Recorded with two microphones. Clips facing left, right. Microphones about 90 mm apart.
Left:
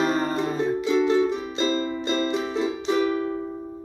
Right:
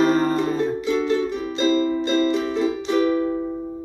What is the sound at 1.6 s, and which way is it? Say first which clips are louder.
Music: right 7 dB; 25° left (ahead or behind).